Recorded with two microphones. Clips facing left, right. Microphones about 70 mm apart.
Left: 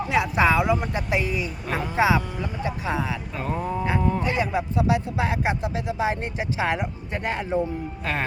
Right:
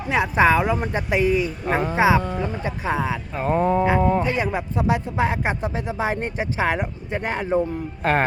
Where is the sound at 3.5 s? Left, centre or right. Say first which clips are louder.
Right 9 dB; right.